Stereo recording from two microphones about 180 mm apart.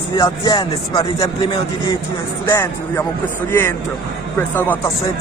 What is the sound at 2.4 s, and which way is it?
Speech, 15° left (ahead or behind).